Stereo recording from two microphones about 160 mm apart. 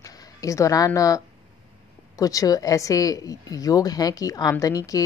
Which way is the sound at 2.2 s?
20° left (ahead or behind).